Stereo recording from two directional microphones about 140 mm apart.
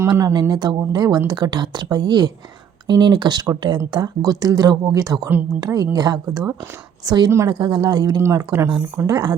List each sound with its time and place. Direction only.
0.1 s speech: 30° right (ahead or behind)
7.5 s speech: 35° right (ahead or behind)
8.6 s speech: 15° right (ahead or behind)
9.0 s speech: 25° right (ahead or behind)